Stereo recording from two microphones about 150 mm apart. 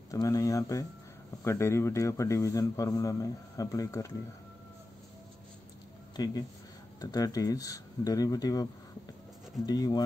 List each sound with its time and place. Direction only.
0.1 s a man's voice: 20° left (ahead or behind)
6.1 s a man's voice: 25° left (ahead or behind)